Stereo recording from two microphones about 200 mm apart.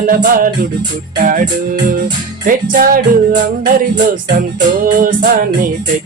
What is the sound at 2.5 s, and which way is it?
Music, 45° right (ahead or behind).